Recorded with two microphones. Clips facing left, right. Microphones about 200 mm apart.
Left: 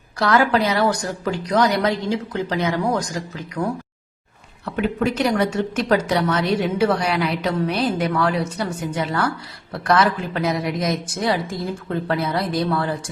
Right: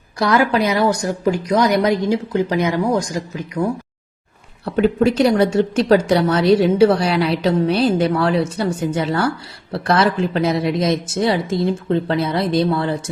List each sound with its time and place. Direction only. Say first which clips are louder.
0.2 s a woman's voice: right 2 dB; 15° right (ahead or behind)
4.6 s a woman's voice: right 6 dB; 35° right (ahead or behind)